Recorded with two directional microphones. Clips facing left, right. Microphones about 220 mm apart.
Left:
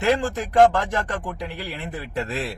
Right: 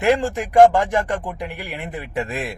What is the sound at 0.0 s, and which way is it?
A man's voice, 15° right (ahead or behind).